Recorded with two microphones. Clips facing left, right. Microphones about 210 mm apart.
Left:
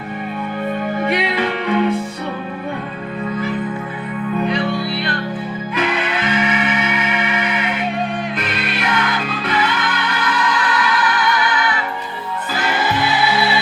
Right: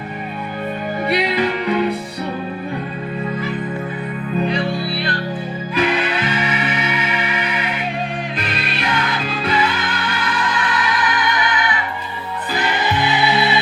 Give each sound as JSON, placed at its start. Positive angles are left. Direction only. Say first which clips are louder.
{"t": 1.0, "sound": "music", "louder": "right 3 dB", "side_deg": -35}
{"t": 5.7, "sound": "music", "louder": "right 2 dB", "side_deg": -35}
{"t": 10.9, "sound": "music", "louder": "left 2 dB", "side_deg": -20}
{"t": 13.0, "sound": "music", "louder": "right 2 dB", "side_deg": -20}